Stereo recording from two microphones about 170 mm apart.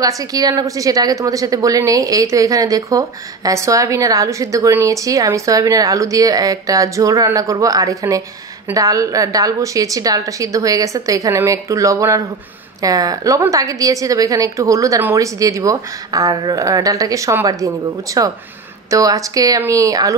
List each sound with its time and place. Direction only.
0.0 s a woman's voice: 20° right (ahead or behind)